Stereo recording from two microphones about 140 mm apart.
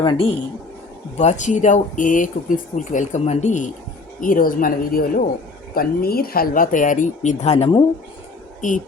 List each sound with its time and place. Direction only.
0.0 s a man's voice: 35° left (ahead or behind)
1.1 s speech: 55° left (ahead or behind)
4.2 s speech: 80° left; by 7.7 s 50° left (ahead or behind)
8.6 s speech: 65° left (ahead or behind)